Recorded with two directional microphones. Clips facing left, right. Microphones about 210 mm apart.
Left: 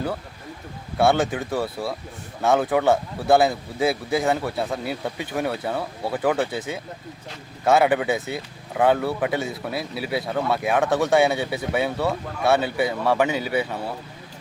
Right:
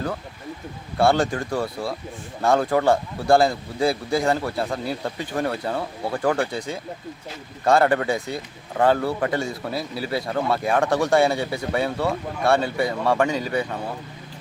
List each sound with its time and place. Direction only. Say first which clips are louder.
0.9 s speech: even; centre (ahead or behind)